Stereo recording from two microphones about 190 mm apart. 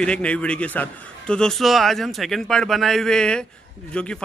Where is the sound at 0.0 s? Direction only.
5° left (ahead or behind).